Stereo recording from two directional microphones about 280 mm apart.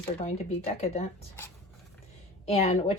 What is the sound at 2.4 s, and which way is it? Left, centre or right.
Speech, left.